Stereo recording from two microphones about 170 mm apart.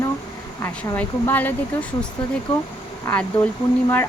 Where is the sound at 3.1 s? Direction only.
10° left (ahead or behind).